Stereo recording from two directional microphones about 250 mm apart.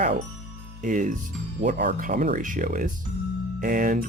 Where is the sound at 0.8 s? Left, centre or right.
Right.